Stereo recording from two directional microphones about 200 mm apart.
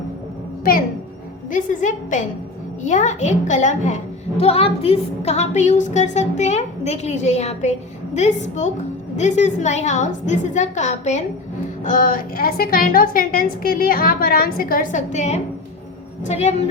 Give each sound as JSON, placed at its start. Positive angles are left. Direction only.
{"t": 1.5, "sound": "a woman's voice", "side_deg": 40}